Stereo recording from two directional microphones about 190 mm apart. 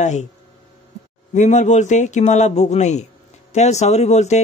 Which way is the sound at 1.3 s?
40° left (ahead or behind).